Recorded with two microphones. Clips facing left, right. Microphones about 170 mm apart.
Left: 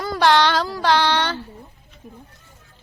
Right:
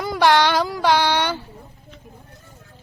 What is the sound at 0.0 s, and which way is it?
Child singing, 15° right (ahead or behind).